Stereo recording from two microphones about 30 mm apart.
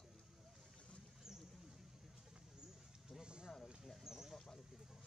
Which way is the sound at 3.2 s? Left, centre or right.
Right.